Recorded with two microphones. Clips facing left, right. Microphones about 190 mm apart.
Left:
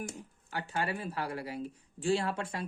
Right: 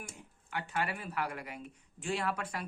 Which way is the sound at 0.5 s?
30° left (ahead or behind).